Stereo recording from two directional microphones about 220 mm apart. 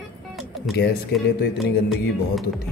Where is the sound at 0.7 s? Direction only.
50° left (ahead or behind).